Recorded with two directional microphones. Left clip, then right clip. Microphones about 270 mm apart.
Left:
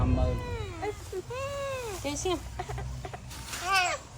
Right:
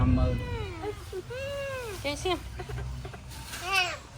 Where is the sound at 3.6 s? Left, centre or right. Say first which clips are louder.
Left 1 dB; centre.